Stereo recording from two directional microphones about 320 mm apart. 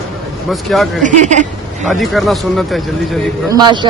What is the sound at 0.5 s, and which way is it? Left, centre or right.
Speech, centre.